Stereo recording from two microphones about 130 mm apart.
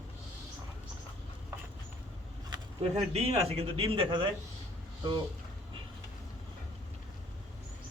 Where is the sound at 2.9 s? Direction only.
55° right (ahead or behind); by 4.4 s 40° right (ahead or behind).